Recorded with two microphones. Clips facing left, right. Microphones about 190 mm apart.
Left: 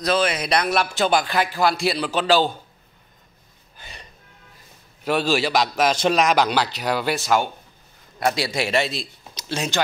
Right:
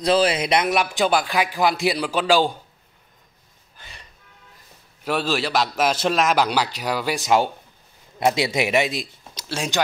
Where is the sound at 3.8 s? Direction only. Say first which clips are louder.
Left 3 dB; 20° left (ahead or behind).